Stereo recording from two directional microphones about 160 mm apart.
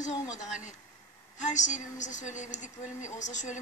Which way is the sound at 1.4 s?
50° left (ahead or behind).